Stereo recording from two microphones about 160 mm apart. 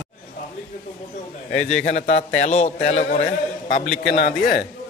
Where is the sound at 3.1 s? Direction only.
60° left (ahead or behind).